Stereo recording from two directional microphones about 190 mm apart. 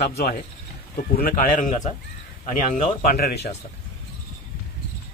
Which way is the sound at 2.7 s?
50° left (ahead or behind).